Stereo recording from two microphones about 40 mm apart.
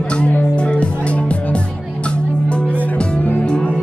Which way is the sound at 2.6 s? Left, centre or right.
Left.